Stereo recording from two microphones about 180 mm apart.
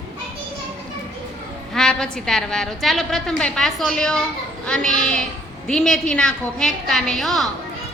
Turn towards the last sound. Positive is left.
turn(degrees=0)  # may be behind; listen again after turning